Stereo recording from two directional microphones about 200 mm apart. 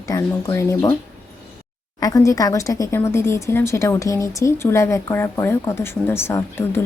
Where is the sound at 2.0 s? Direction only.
15° left (ahead or behind).